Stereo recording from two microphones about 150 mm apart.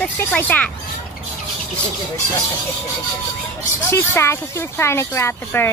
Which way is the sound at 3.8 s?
20° left (ahead or behind).